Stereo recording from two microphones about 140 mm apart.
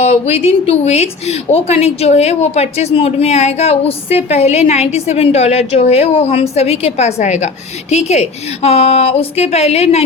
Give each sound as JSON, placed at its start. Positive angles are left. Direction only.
{"t": 0.0, "sound": "a woman's voice", "side_deg": 45}